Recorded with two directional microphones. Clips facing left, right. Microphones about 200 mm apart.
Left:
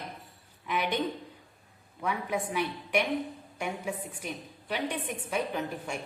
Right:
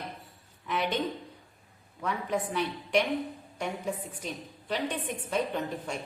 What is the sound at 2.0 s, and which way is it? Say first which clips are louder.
A woman's voice: right 1 dB; 10° left (ahead or behind).